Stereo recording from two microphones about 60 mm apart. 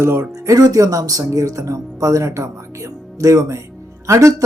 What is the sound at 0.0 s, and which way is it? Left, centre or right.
Speech, right.